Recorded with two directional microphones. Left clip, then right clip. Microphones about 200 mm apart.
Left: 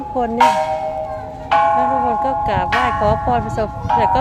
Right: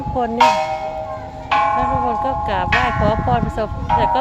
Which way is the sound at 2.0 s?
5° left (ahead or behind).